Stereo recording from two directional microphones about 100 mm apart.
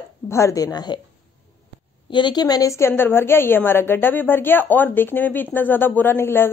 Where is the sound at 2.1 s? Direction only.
50° left (ahead or behind).